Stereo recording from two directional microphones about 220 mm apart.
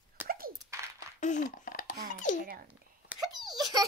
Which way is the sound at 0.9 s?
35° left (ahead or behind).